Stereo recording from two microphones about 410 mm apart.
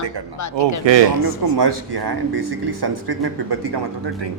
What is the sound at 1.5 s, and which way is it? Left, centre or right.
Speech, right.